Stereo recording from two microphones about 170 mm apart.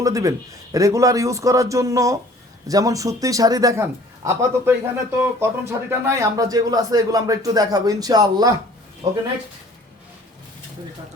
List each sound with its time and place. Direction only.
0.0 s speech: 20° right (ahead or behind)